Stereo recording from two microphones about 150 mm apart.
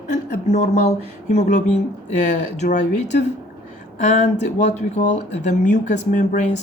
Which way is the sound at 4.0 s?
50° left (ahead or behind).